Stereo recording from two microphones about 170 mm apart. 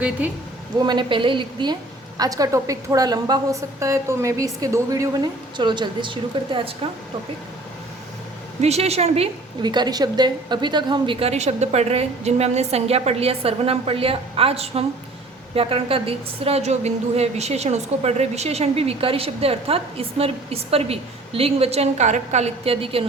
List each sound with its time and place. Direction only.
0.2 s a woman's voice: 10° right (ahead or behind)
0.8 s a woman's voice: 25° right (ahead or behind)
8.6 s a woman's voice: 40° right (ahead or behind)